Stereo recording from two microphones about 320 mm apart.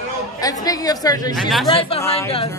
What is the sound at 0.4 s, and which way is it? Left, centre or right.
Speech, centre.